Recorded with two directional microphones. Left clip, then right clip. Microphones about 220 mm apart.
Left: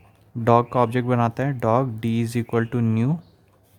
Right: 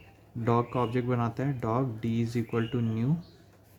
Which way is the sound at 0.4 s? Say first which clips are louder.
Left 10 dB; 40° left (ahead or behind).